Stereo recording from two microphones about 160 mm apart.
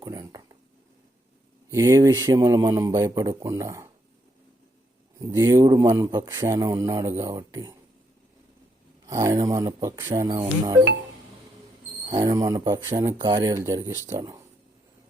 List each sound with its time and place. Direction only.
0.0 s speech: 20° right (ahead or behind)
1.7 s a man's voice: 20° right (ahead or behind)
5.2 s a man's voice: 20° right (ahead or behind)
9.0 s a man's voice: 20° right (ahead or behind)
12.0 s a man's voice: 25° right (ahead or behind)